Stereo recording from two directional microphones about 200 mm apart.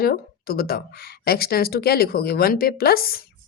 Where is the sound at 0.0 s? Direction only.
50° left (ahead or behind).